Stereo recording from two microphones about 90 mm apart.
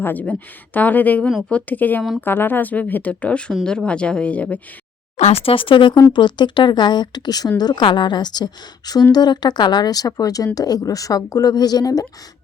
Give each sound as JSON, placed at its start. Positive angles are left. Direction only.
{"t": 0.0, "sound": "a woman's voice", "side_deg": 20}
{"t": 5.3, "sound": "a woman's voice", "side_deg": 90}